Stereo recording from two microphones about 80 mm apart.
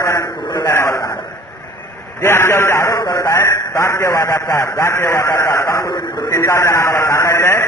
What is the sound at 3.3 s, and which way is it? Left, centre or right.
A man's voice, left.